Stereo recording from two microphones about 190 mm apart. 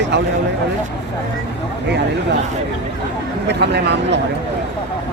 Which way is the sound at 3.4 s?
60° right (ahead or behind).